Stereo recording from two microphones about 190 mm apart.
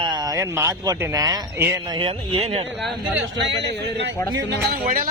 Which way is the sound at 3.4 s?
65° right (ahead or behind).